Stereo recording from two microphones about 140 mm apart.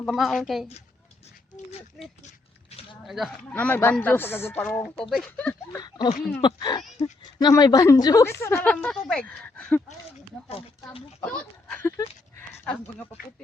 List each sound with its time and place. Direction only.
0.1 s a woman's voice: centre (ahead or behind)
2.2 s a sound: 45° left (ahead or behind)
3.1 s a woman's voice: centre (ahead or behind)
3.5 s a woman's voice: 15° left (ahead or behind)
5.7 s speech: 30° left (ahead or behind); by 9.8 s 10° left (ahead or behind)
11.3 s speech: 10° left (ahead or behind)